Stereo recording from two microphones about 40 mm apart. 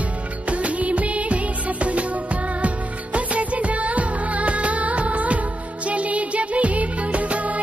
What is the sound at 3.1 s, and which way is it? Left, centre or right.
Music of bollywood, right.